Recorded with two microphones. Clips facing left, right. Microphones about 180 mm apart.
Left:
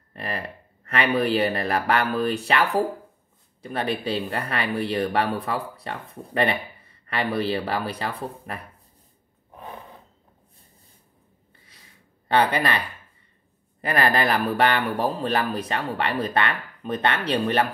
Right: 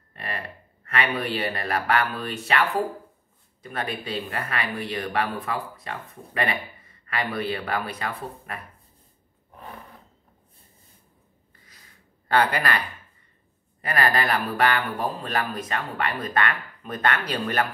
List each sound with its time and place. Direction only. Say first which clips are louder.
0.1 s a sound: left 3 dB; 40° left (ahead or behind)
0.8 s speech: left 4 dB; 40° left (ahead or behind)
12.3 s speech: left 1 dB; 25° left (ahead or behind)